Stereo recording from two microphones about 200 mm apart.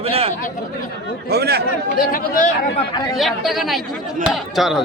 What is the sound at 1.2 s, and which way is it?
Speech, 55° right (ahead or behind).